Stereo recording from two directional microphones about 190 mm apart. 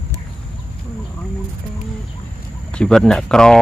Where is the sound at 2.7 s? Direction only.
5° left (ahead or behind).